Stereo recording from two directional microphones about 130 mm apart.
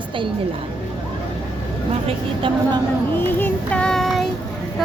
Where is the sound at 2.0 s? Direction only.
40° right (ahead or behind).